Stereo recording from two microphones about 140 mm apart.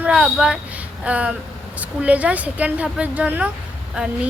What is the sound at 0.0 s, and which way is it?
A woman's voice, 5° right (ahead or behind).